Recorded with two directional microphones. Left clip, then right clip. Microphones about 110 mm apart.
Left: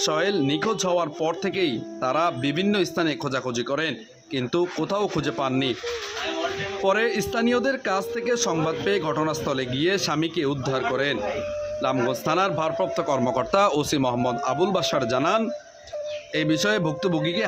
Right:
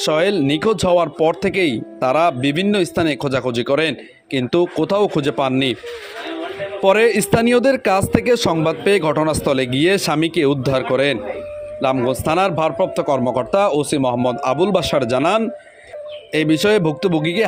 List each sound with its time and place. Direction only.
0.0 s a man's voice: 50° right (ahead or behind)
6.8 s speech: 55° right (ahead or behind)
11.8 s a man's voice: 45° right (ahead or behind)
12.7 s a man's voice: 35° right (ahead or behind)
14.4 s a man's voice: 50° right (ahead or behind)